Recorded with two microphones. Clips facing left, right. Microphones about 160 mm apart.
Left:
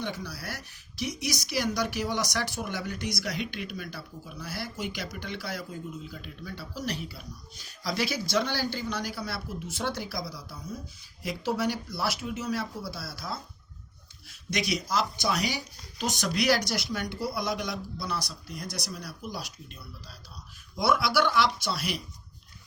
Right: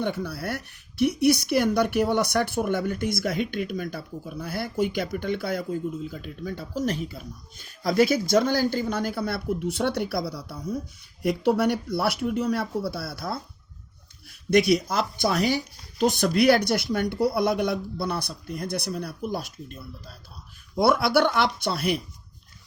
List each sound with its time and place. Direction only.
0.0 s speech: 55° right (ahead or behind)
14.7 s speech: 55° right (ahead or behind)